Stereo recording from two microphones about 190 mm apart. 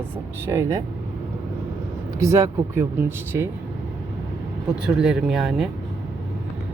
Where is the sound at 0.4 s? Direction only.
15° right (ahead or behind).